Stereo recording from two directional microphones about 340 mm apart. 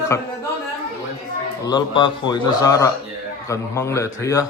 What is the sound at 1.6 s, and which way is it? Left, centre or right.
Speech, centre.